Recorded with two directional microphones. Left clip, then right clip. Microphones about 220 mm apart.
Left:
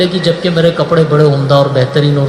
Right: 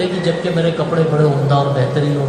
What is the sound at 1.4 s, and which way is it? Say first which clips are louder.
Speech: left 6 dB; 45° left (ahead or behind).